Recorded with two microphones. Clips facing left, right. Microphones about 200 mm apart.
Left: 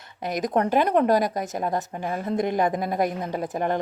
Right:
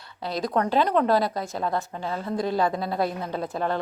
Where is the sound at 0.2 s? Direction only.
20° left (ahead or behind).